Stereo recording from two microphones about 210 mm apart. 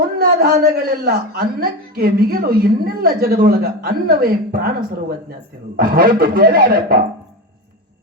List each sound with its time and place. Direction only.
0.2 s a man's voice: 45° right (ahead or behind)